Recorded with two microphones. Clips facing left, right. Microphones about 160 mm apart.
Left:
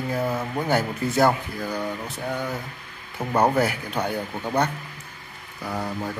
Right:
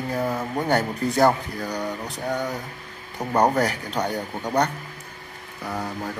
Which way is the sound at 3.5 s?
10° left (ahead or behind).